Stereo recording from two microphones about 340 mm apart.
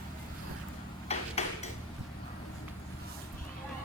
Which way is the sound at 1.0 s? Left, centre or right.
Centre.